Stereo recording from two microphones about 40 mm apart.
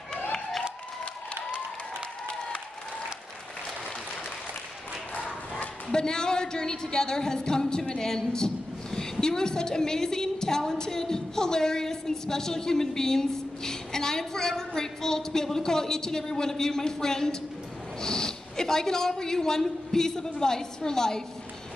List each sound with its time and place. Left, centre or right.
5.1 s dog: left
5.9 s a woman's voice: centre